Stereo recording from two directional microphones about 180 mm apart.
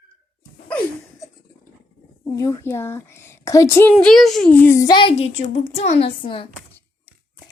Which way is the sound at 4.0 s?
Centre (ahead or behind).